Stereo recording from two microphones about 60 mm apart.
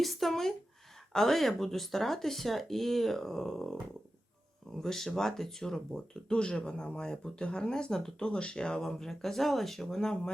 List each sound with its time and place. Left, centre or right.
0.0 s speech: centre